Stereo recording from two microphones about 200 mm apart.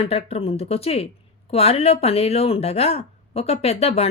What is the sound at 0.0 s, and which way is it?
Speech, 30° left (ahead or behind).